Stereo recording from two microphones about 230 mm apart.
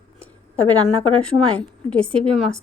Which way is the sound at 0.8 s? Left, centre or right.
Centre.